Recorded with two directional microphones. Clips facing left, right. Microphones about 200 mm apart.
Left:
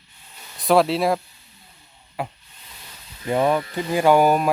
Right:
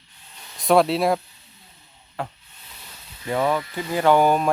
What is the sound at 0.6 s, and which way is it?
Speech, centre (ahead or behind).